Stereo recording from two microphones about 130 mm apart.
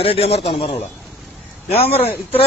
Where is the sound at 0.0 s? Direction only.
50° left (ahead or behind).